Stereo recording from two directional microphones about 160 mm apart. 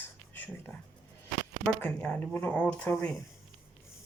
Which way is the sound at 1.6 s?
5° left (ahead or behind).